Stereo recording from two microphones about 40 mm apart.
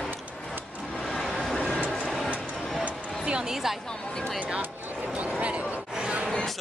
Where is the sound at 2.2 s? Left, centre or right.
Right.